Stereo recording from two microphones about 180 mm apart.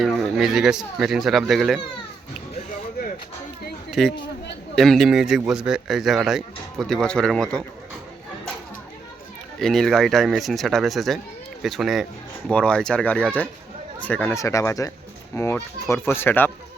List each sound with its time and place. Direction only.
0.0 s speech: centre (ahead or behind)
4.0 s speech: centre (ahead or behind)
9.6 s speech: centre (ahead or behind)